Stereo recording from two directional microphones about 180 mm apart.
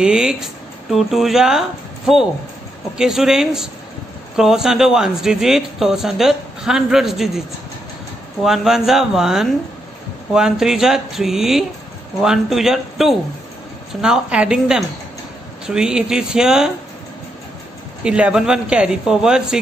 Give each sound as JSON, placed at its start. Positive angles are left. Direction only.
{"t": 0.0, "sound": "a man's voice", "side_deg": -5}
{"t": 8.5, "sound": "a man's voice", "side_deg": 0}
{"t": 18.0, "sound": "a man's voice", "side_deg": -5}